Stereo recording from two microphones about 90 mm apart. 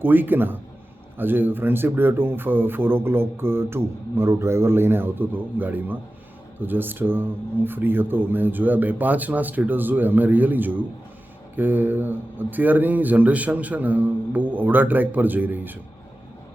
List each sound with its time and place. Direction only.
0.0 s speech: 20° right (ahead or behind)